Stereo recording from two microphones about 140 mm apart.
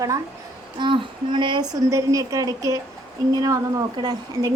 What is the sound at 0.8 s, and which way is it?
Speech, 35° right (ahead or behind).